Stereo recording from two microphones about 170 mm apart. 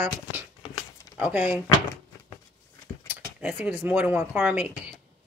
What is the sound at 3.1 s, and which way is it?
Speech, 5° right (ahead or behind).